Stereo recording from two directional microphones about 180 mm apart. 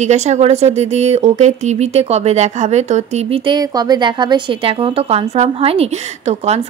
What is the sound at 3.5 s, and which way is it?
A woman's voice, 25° right (ahead or behind).